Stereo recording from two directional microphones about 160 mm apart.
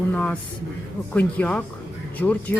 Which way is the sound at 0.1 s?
10° left (ahead or behind).